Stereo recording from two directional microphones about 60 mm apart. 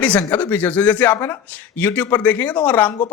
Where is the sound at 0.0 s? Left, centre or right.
Left.